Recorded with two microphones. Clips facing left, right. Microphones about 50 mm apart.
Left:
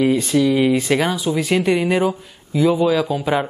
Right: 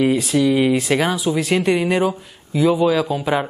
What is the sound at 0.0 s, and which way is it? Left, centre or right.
Speech, centre.